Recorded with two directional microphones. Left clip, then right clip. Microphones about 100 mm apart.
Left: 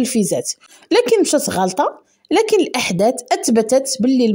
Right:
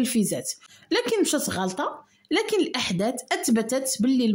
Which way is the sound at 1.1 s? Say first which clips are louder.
Left 9 dB; 50° left (ahead or behind).